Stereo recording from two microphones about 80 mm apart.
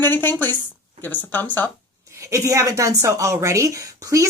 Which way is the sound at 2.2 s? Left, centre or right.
Right.